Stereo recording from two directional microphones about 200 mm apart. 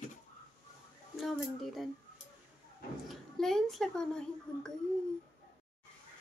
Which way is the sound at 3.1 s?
Centre (ahead or behind).